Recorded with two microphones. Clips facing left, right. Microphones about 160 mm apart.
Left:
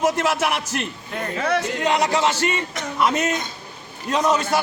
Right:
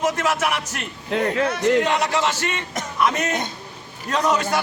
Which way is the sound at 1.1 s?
90° right.